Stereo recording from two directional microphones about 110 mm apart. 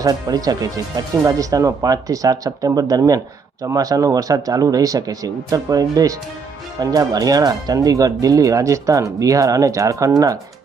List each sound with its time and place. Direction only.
0.0 s speech: 35° right (ahead or behind)